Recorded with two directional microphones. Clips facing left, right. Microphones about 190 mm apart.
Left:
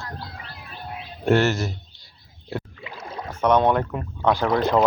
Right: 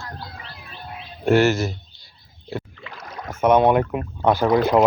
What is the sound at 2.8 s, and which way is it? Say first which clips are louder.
Rowboat: left 2 dB; 25° left (ahead or behind).